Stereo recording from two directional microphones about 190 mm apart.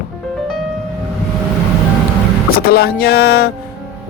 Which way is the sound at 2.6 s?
55° left (ahead or behind).